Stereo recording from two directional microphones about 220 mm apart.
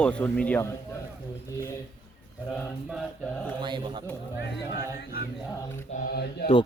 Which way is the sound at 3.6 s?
20° right (ahead or behind).